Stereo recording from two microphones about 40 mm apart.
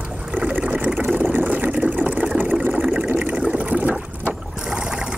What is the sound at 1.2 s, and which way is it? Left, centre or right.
Vehicle, right.